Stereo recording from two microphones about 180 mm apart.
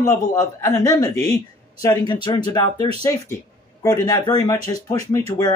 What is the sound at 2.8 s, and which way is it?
Speech, 35° right (ahead or behind).